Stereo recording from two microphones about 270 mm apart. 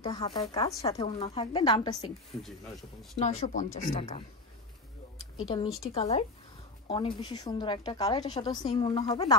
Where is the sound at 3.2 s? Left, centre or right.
Left.